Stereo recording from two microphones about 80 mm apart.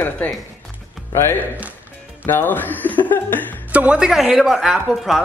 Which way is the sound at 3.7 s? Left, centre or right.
Centre.